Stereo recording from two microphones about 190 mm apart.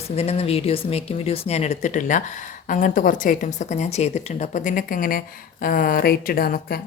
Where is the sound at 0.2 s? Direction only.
30° left (ahead or behind).